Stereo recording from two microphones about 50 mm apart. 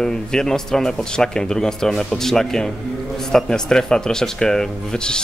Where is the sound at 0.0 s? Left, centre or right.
Centre.